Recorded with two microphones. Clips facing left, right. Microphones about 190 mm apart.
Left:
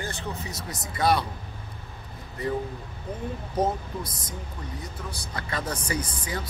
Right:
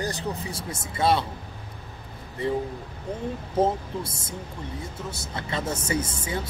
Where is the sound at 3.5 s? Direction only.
25° right (ahead or behind).